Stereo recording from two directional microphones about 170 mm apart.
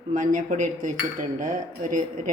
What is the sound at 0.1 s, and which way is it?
Speech, 50° right (ahead or behind).